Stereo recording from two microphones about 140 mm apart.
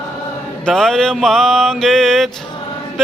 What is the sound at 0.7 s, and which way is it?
Music, 5° left (ahead or behind).